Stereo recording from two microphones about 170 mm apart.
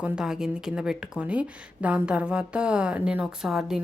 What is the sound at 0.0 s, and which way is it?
Speech, 5° right (ahead or behind).